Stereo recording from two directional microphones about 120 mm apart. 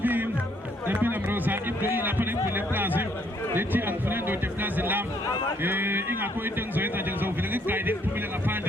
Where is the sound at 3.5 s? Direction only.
15° right (ahead or behind).